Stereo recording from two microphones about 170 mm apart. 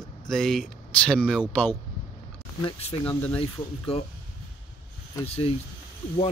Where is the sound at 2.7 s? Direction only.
35° left (ahead or behind).